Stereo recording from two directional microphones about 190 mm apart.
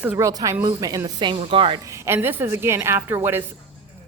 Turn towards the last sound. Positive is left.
turn(degrees=-10)  # may be behind; listen again after turning